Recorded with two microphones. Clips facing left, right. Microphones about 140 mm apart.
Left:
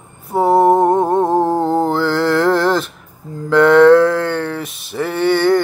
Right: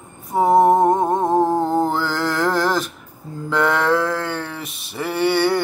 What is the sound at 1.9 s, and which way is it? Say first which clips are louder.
Mantra: left 6 dB; centre (ahead or behind).